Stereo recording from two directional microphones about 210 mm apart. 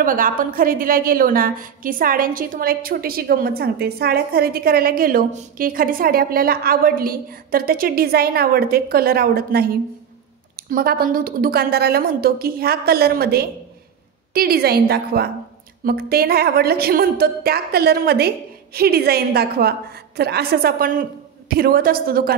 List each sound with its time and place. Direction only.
0.0 s a woman's voice: 40° right (ahead or behind)